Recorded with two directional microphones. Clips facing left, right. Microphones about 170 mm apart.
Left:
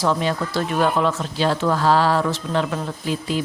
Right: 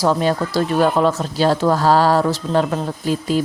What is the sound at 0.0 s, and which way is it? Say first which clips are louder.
Speech: right 4 dB; 40° right (ahead or behind).